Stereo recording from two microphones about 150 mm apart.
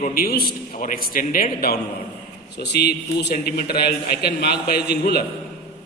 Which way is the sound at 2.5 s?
90° left.